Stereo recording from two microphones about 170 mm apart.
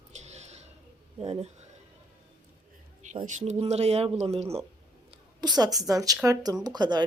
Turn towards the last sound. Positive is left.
turn(degrees=-25)  # may be behind; listen again after turning